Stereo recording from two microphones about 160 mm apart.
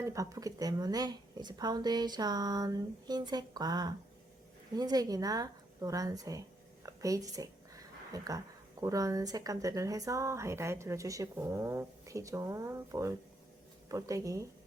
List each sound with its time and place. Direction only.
0.0 s speech: 20° right (ahead or behind)
6.8 s a sound: 20° right (ahead or behind)
8.8 s speech: 20° right (ahead or behind)